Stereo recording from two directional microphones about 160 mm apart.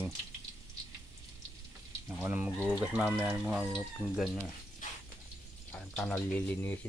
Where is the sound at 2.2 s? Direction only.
15° right (ahead or behind).